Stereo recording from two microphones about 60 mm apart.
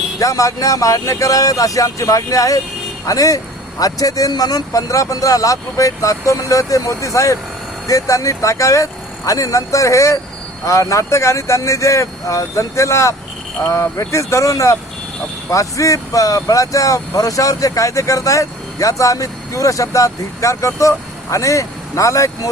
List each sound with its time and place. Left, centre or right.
0.2 s speech: left
7.9 s speech: left